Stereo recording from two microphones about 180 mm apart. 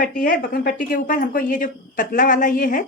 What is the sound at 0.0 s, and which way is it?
A woman's voice, 50° left (ahead or behind).